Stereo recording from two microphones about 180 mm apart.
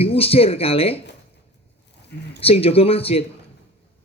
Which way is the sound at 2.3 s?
35° left (ahead or behind).